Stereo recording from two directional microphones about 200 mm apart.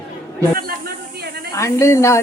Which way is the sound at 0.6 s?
50° right (ahead or behind).